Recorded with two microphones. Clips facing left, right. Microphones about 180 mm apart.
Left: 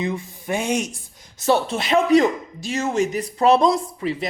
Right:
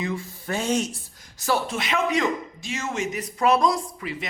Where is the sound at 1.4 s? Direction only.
25° left (ahead or behind).